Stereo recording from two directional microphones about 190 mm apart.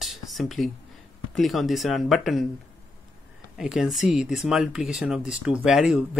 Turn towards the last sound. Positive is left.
turn(degrees=-5)  # may be behind; listen again after turning